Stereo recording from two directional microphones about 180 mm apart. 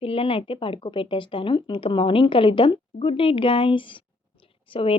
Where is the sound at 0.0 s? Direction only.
30° left (ahead or behind).